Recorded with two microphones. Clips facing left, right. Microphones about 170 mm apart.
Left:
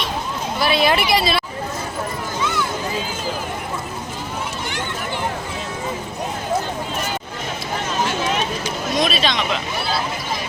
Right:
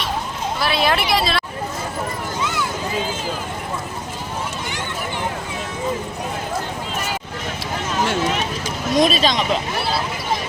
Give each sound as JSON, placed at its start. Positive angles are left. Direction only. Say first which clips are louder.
{"t": 0.6, "sound": "speech", "louder": "left 2 dB", "side_deg": 0}
{"t": 9.0, "sound": "speech", "louder": "right 4 dB", "side_deg": -40}